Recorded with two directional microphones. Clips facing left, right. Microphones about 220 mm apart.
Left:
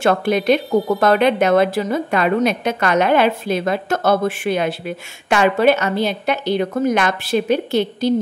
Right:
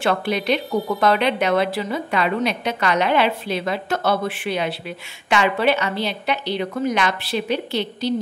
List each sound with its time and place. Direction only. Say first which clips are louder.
0.0 s speech: left 5 dB; 45° left (ahead or behind)